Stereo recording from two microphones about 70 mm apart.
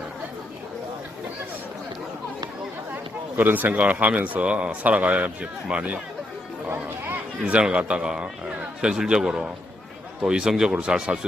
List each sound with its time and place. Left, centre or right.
2.9 s speech: right
7.4 s a man's voice: centre